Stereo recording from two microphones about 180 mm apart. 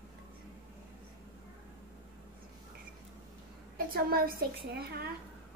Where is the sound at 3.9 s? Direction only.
55° right (ahead or behind).